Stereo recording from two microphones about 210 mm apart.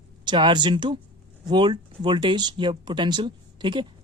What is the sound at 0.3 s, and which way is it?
Speech, 20° right (ahead or behind).